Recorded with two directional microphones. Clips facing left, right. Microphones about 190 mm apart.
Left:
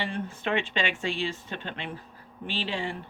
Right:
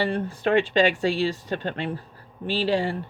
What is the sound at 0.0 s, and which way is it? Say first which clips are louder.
Speech: right 7 dB; 40° right (ahead or behind).